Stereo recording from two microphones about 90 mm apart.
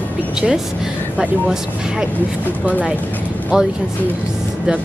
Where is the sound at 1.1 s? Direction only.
5° right (ahead or behind).